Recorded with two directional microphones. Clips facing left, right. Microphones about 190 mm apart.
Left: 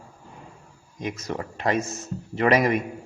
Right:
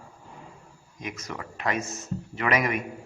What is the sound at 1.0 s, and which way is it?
A man's voice, 30° left (ahead or behind).